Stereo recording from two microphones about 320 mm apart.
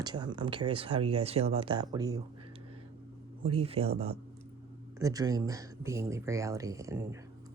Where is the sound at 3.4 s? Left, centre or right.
Centre.